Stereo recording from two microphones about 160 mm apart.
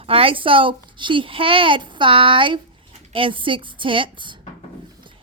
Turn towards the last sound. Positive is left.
turn(degrees=-30)  # may be behind; listen again after turning